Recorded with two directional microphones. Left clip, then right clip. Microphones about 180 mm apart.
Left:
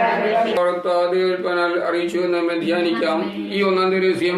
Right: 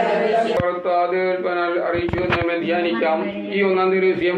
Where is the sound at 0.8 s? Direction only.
70° left (ahead or behind).